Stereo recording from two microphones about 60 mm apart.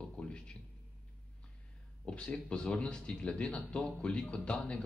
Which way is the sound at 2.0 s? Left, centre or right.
Centre.